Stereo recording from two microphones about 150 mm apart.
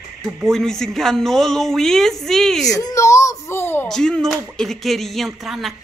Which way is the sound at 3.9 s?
5° left (ahead or behind).